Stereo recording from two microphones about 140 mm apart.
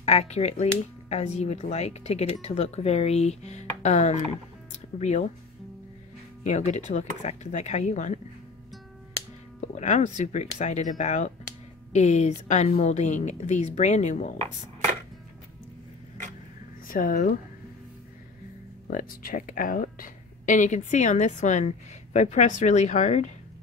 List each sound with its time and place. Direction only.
0.0 s a woman's voice: 50° left (ahead or behind)
6.4 s a woman's voice: 55° left (ahead or behind)
9.6 s a woman's voice: 55° left (ahead or behind)
16.8 s speech: 90° left
18.9 s a woman's voice: 85° left; by 23.3 s 55° left (ahead or behind)